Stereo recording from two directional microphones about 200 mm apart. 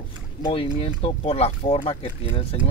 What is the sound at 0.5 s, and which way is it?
Speech, 30° left (ahead or behind).